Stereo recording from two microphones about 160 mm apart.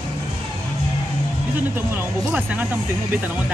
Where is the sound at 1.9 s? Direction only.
10° right (ahead or behind).